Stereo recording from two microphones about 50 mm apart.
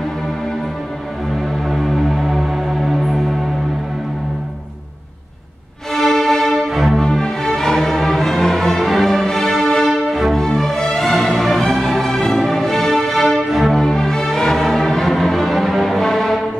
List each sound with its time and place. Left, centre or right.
1.7 s music: centre
5.9 s music: centre
7.0 s music: centre
10.0 s music: centre
10.3 s music: centre